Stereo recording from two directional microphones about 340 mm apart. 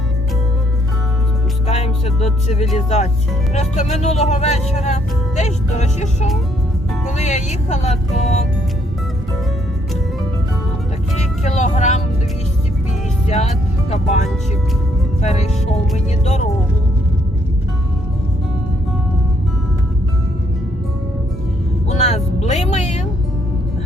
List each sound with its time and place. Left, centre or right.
1.6 s music: centre
2.7 s speech: centre
11.4 s speech: centre
13.2 s speech: centre
21.8 s speech: centre